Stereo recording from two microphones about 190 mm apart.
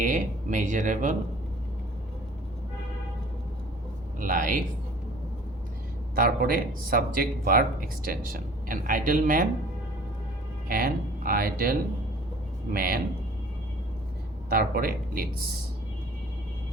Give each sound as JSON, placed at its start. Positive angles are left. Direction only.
{"t": 0.0, "sound": "speech", "side_deg": -40}
{"t": 4.2, "sound": "speech", "side_deg": -45}
{"t": 6.1, "sound": "speech", "side_deg": -50}
{"t": 10.7, "sound": "speech", "side_deg": -50}
{"t": 14.5, "sound": "speech", "side_deg": -50}